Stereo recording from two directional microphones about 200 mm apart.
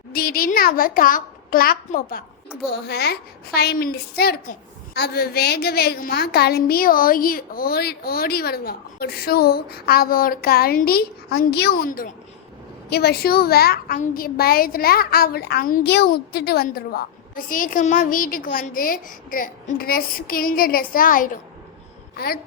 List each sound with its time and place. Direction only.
0.1 s a woman's voice: 50° left (ahead or behind)
2.6 s a woman's voice: 55° left (ahead or behind)